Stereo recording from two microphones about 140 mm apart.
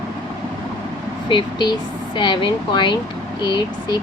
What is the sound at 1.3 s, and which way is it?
Speech, 35° left (ahead or behind).